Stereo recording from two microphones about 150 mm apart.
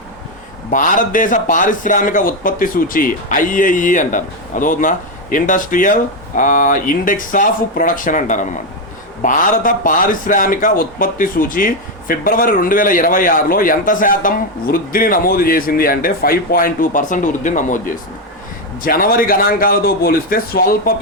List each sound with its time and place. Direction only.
0.7 s speech: 60° left (ahead or behind)
18.8 s speech: 75° left (ahead or behind)